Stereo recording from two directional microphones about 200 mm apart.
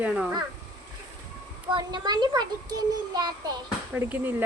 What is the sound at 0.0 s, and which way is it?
Speech, centre (ahead or behind).